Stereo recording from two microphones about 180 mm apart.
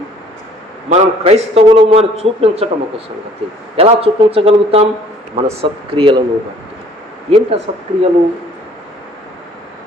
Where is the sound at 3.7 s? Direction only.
30° right (ahead or behind).